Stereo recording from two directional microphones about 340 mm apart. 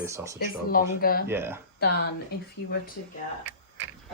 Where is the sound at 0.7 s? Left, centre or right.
Left.